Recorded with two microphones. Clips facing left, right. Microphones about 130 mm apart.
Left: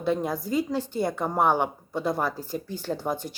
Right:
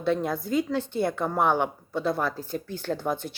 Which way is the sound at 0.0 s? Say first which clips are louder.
Even; 10° left (ahead or behind).